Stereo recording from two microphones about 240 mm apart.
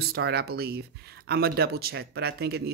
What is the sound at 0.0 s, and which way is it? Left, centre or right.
Speech, right.